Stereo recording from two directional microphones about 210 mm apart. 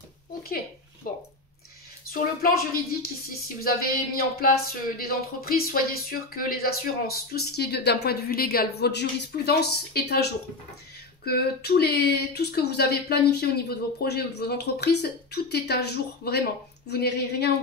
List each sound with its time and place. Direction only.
1.1 s speech: 40° left (ahead or behind)
11.2 s speech: 50° left (ahead or behind)